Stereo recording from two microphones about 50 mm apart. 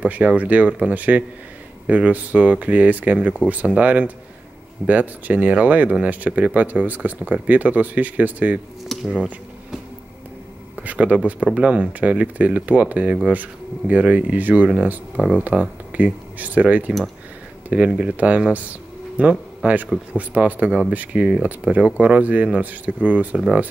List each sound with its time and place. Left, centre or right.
0.0 s speech: right
8.9 s a sound: centre
10.8 s speech: right